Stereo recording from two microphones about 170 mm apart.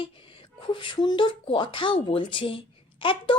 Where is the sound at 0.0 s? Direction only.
30° left (ahead or behind).